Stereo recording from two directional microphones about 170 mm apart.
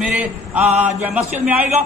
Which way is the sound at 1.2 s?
40° right (ahead or behind).